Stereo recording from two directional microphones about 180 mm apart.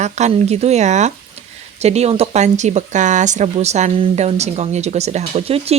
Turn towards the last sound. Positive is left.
turn(degrees=-35)  # may be behind; listen again after turning